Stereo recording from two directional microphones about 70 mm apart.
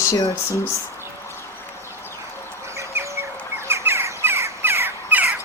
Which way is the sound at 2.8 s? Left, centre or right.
Right.